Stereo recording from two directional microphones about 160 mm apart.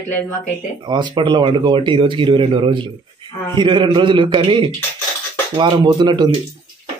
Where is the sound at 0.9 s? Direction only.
30° right (ahead or behind).